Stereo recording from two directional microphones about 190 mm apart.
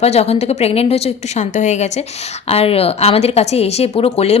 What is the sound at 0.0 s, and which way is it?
A woman's voice, 35° left (ahead or behind).